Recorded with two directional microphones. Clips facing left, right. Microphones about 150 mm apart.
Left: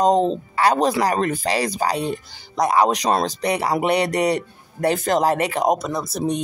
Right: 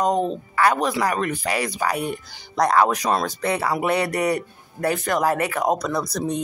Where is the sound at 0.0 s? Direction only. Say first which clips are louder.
Left 4 dB; 25° left (ahead or behind).